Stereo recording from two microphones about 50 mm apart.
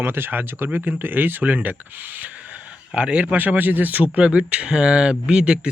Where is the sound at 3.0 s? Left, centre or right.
Right.